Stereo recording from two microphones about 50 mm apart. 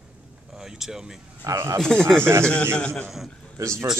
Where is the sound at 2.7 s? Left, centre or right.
Left.